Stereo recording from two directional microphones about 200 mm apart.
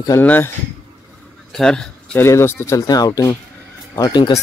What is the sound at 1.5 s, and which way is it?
Speech, 5° left (ahead or behind).